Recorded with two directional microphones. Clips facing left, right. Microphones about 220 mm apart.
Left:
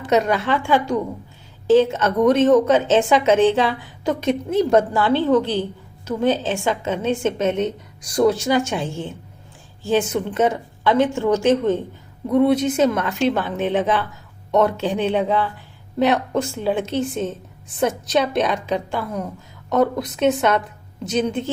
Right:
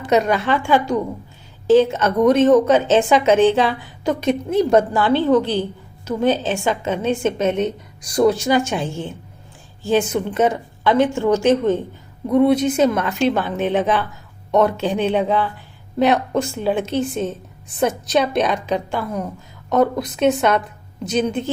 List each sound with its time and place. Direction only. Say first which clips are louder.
0.1 s a woman's voice: right 1 dB; 15° right (ahead or behind)